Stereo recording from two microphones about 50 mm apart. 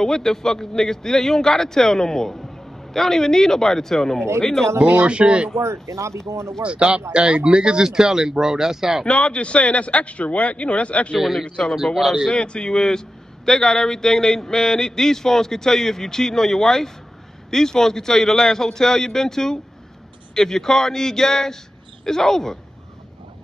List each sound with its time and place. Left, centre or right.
0.0 s a sound: centre
5.0 s speech: right
5.6 s speech: right
6.6 s speech: right; by 9.0 s centre
9.0 s a man's voice: left
11.1 s speech: centre
11.4 s a sound: centre
11.7 s speech: centre
12.3 s a sound: centre